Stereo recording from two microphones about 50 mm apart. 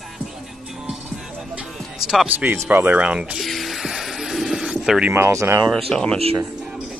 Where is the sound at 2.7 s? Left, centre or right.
Right.